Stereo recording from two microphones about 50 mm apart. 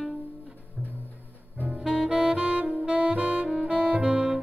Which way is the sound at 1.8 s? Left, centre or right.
Centre.